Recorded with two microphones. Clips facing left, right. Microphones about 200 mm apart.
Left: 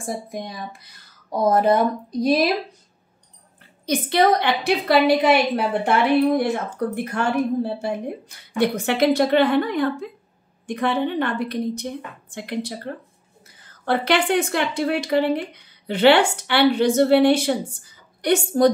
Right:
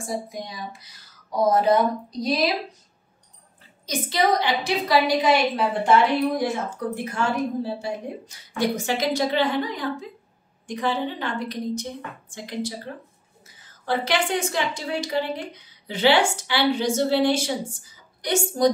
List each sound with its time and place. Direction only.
0.0 s speech: 55° left (ahead or behind)
3.8 s speech: 60° left (ahead or behind)